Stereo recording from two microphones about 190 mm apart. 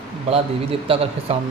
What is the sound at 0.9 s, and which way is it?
Speech, 30° right (ahead or behind).